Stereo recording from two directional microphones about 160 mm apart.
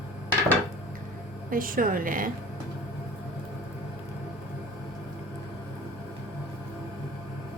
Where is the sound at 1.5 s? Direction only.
60° right (ahead or behind).